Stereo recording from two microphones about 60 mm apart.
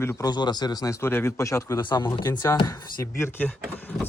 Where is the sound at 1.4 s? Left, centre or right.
Left.